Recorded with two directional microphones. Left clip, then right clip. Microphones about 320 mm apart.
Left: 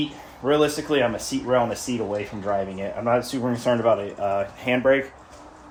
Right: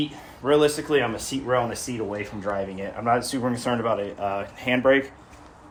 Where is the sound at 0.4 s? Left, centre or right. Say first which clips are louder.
Right 1 dB; centre.